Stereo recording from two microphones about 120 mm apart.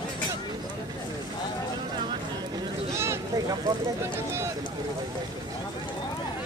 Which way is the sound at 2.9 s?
20° right (ahead or behind).